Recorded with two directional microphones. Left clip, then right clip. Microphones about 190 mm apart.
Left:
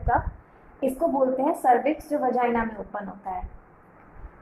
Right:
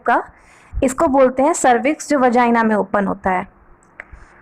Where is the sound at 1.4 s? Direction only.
45° right (ahead or behind).